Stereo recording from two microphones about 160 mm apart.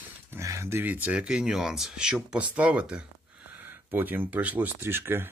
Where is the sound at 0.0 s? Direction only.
15° right (ahead or behind).